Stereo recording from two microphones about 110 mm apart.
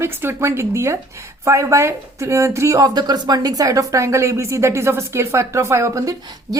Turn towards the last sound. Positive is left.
turn(degrees=-30)  # may be behind; listen again after turning